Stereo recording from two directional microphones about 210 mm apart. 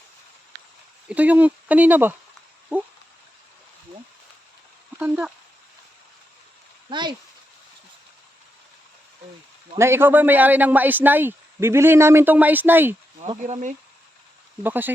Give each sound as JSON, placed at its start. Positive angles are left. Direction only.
{"t": 1.0, "sound": "speech", "side_deg": -5}
{"t": 4.9, "sound": "speech", "side_deg": -10}
{"t": 6.9, "sound": "speech", "side_deg": -20}
{"t": 9.7, "sound": "speech", "side_deg": -10}
{"t": 13.4, "sound": "speech", "side_deg": -35}
{"t": 14.6, "sound": "speech", "side_deg": -10}